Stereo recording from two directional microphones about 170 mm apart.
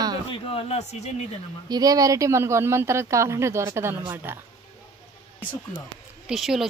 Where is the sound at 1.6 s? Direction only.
20° right (ahead or behind).